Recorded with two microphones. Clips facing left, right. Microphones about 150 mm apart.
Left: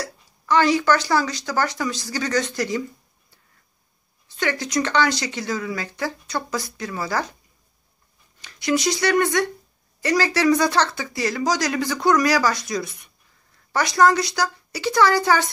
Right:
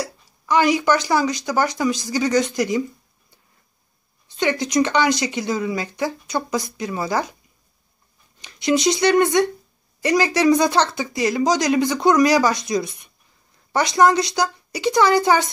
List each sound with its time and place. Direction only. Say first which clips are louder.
0.0 s speech: right 3 dB; 15° right (ahead or behind)
4.4 s speech: right 4 dB; 20° right (ahead or behind)
8.4 s speech: right 3 dB; 20° right (ahead or behind)